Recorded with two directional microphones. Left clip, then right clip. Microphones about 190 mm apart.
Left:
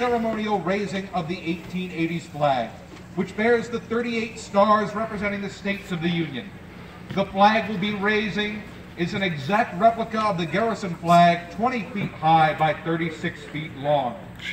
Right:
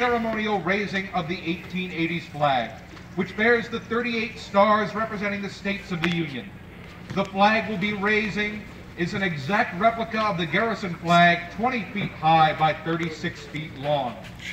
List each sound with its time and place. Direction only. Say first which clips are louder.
0.0 s a man's voice: even; 20° left (ahead or behind)
7.2 s a man's voice: left 2 dB; 20° left (ahead or behind)